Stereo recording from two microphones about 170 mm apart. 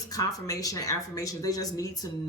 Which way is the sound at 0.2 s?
20° left (ahead or behind).